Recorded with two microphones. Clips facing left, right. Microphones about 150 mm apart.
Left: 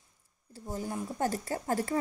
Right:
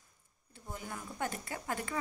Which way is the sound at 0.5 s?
35° left (ahead or behind).